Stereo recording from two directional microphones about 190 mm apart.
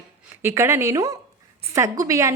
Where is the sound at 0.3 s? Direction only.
15° right (ahead or behind).